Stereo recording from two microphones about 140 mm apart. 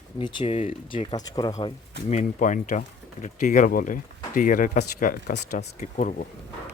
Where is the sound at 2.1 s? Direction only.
55° left (ahead or behind); by 5.3 s 80° left.